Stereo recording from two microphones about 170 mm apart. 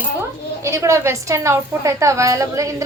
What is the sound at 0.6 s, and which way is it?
A woman's voice, 15° right (ahead or behind).